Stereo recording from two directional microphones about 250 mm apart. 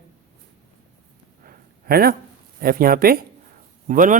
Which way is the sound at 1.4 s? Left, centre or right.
Right.